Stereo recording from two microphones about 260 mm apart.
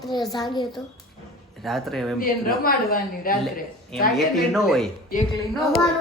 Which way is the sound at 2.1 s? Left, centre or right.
Left.